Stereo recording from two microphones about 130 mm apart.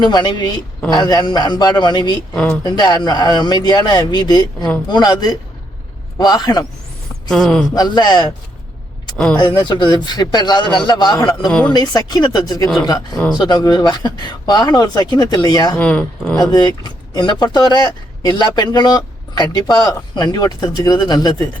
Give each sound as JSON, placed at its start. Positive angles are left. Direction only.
{"t": 0.0, "sound": "speech", "side_deg": 35}
{"t": 2.3, "sound": "speech", "side_deg": 5}
{"t": 2.6, "sound": "speech", "side_deg": 30}
{"t": 7.3, "sound": "speech", "side_deg": 5}
{"t": 7.8, "sound": "speech", "side_deg": 35}
{"t": 9.1, "sound": "speech", "side_deg": 5}
{"t": 9.6, "sound": "speech", "side_deg": 35}
{"t": 15.8, "sound": "speech", "side_deg": 10}
{"t": 16.4, "sound": "speech", "side_deg": 30}